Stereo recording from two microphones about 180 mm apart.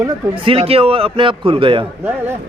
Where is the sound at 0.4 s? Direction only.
30° right (ahead or behind).